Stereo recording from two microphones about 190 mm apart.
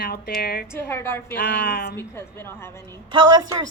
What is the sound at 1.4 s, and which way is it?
Speech, 55° left (ahead or behind).